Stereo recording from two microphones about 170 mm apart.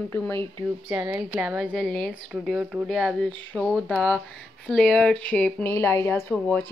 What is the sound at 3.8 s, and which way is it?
Speech, 10° left (ahead or behind).